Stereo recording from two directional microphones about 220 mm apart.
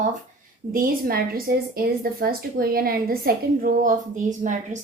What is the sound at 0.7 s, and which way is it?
A woman's voice, 40° right (ahead or behind).